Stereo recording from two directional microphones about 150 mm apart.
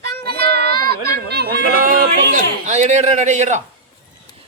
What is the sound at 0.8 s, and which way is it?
Speech, 90° right.